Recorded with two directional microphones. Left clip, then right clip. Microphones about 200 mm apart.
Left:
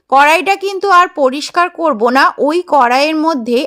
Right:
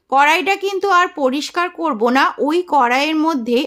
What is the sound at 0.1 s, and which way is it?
A woman's voice, 30° left (ahead or behind).